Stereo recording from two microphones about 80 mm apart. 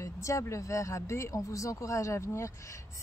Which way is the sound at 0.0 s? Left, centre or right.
Left.